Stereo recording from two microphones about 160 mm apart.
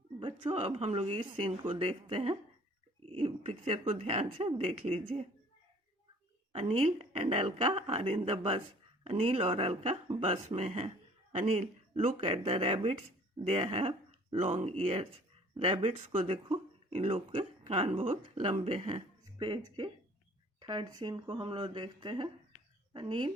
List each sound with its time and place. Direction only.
0.2 s speech: 35° right (ahead or behind)
3.1 s a sound: 35° right (ahead or behind)
3.9 s speech: 40° right (ahead or behind)
6.5 s speech: 35° right (ahead or behind)